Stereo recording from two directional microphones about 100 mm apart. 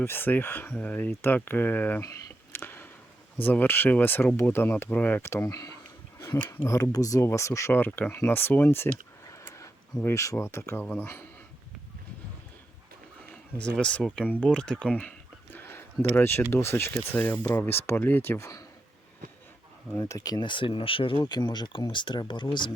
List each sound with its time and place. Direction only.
0.0 s speech: 20° left (ahead or behind)
2.0 s a sound: 25° left (ahead or behind)
3.4 s speech: 20° left (ahead or behind)
9.4 s a sound: 25° left (ahead or behind)
10.0 s speech: 30° left (ahead or behind)
13.3 s speech: 10° left (ahead or behind)
15.5 s a sound: 20° left (ahead or behind)
16.5 s speech: 25° left (ahead or behind)
20.0 s speech: 35° left (ahead or behind); by 21.2 s 65° left (ahead or behind)
21.2 s speech: 45° left (ahead or behind)